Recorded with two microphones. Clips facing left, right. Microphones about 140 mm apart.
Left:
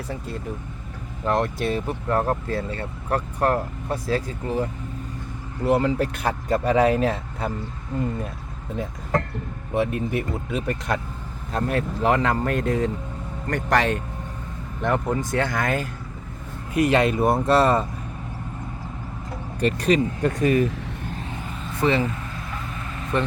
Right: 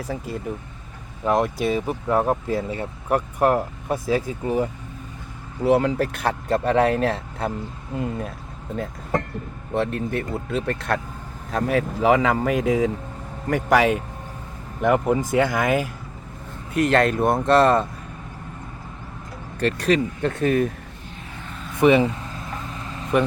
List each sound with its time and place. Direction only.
1.2 s speech: 10° right (ahead or behind)
5.6 s speech: centre (ahead or behind)
9.7 s speech: 10° left (ahead or behind)
16.7 s speech: 10° left (ahead or behind)
19.8 s speech: centre (ahead or behind)
21.8 s vehicle: 15° right (ahead or behind)